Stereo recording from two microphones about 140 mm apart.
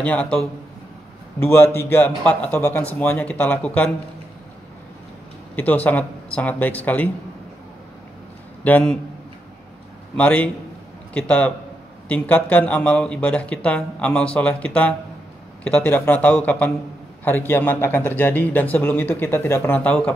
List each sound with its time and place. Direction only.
0.0 s speech: 10° left (ahead or behind)
1.4 s speech: 15° left (ahead or behind)
5.6 s speech: 10° left (ahead or behind)
8.6 s speech: 10° left (ahead or behind)
10.1 s speech: 10° left (ahead or behind)